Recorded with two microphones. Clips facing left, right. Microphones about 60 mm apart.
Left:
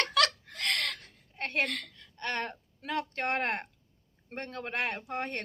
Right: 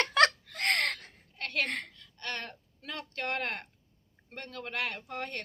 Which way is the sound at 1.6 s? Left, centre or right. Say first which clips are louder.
Even; right.